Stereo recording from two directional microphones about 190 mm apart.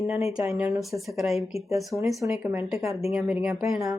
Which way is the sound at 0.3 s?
5° right (ahead or behind).